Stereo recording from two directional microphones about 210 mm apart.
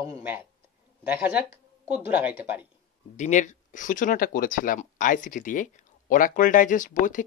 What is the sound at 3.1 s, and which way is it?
Speech, 35° left (ahead or behind).